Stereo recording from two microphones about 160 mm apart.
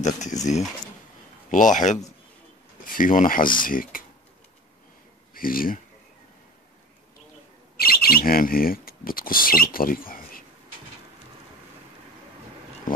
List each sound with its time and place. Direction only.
0.0 s speech: 50° left (ahead or behind)
1.5 s speech: 50° left (ahead or behind)
5.3 s speech: 65° left (ahead or behind)
7.7 s speech: 70° left (ahead or behind)